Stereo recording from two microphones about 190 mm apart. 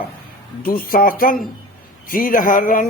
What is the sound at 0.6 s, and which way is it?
Speech, 50° left (ahead or behind).